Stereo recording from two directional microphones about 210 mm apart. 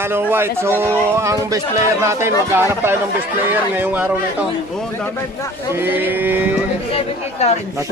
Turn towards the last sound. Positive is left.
turn(degrees=30)  # may be behind; listen again after turning